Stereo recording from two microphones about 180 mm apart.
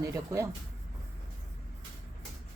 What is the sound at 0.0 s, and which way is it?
Speech, 15° right (ahead or behind).